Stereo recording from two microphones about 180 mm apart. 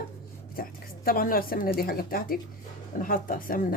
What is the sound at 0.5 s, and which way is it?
A woman's voice, 55° left (ahead or behind).